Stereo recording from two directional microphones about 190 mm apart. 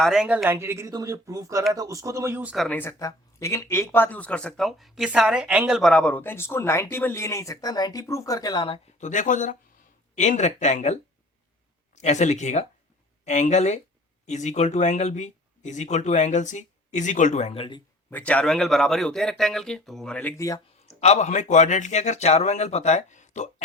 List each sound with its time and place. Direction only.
0.0 s speech: 5° right (ahead or behind)
0.4 s speech: 15° right (ahead or behind)
2.6 s speech: 10° left (ahead or behind)
9.0 s speech: 40° left (ahead or behind)
11.9 s speech: 35° left (ahead or behind)
18.1 s speech: 5° left (ahead or behind)
20.8 s speech: 35° left (ahead or behind)